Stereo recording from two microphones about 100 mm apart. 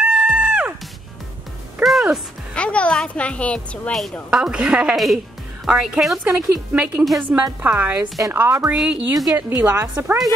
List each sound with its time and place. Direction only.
0.0 s music: 10° right (ahead or behind)
1.8 s music: centre (ahead or behind)
2.5 s a woman's voice: 10° left (ahead or behind)
4.3 s a woman's voice: 10° right (ahead or behind)
6.2 s a woman's voice: 15° right (ahead or behind)
9.1 s a woman's voice: 40° right (ahead or behind)
9.5 s a woman's voice: 20° right (ahead or behind)